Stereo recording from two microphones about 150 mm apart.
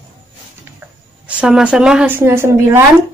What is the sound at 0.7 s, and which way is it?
A woman's voice, 10° right (ahead or behind).